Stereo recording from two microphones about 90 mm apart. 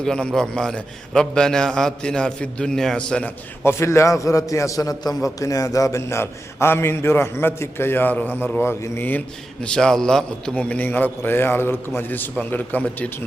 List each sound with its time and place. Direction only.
0.0 s a man's voice: 5° left (ahead or behind)
3.6 s a man's voice: 30° left (ahead or behind)
9.6 s a man's voice: 10° left (ahead or behind)